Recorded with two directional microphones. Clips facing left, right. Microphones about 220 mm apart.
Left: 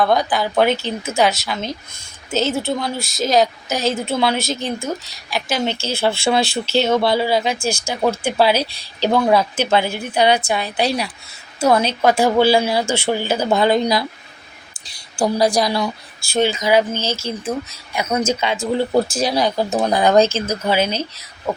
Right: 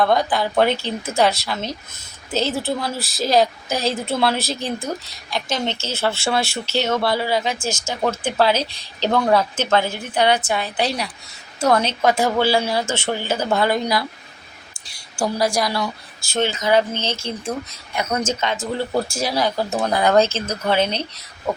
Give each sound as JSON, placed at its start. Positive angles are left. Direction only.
{"t": 0.0, "sound": "a woman's voice", "side_deg": 0}
{"t": 15.2, "sound": "a woman's voice", "side_deg": 20}